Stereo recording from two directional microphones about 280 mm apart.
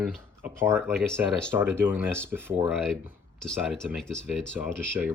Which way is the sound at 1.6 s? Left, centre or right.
Centre.